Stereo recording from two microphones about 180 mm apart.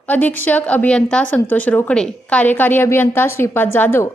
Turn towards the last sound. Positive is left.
turn(degrees=10)  # may be behind; listen again after turning